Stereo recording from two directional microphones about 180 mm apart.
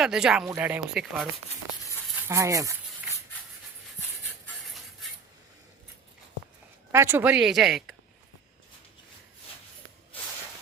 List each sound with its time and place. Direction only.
0.0 s speech: 5° right (ahead or behind)
2.2 s speech: 15° right (ahead or behind)
6.9 s speech: 15° right (ahead or behind)